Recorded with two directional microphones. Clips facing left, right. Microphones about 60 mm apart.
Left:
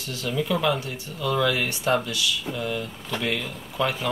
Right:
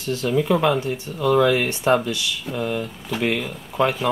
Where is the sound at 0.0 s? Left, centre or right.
Right.